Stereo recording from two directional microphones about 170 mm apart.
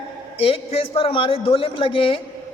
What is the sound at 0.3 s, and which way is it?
A man's voice, 35° left (ahead or behind).